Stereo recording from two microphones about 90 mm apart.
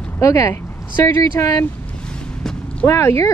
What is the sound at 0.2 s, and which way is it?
Speech, 35° left (ahead or behind).